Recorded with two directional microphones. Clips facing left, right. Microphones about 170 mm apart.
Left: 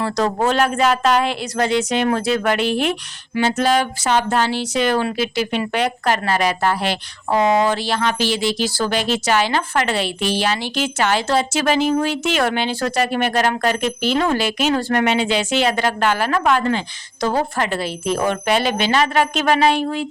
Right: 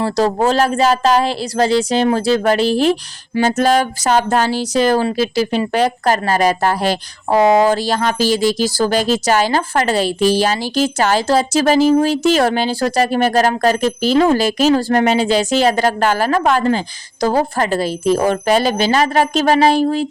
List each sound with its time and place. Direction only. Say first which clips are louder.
0.0 s speech: right 4 dB; 30° right (ahead or behind)